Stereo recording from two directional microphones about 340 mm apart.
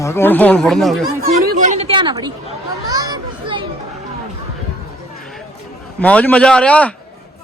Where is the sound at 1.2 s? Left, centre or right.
Right.